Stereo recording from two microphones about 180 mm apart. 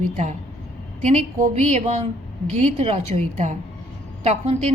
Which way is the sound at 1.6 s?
35° right (ahead or behind).